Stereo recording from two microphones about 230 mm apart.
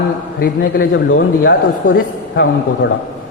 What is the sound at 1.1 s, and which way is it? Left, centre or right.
Speech, left.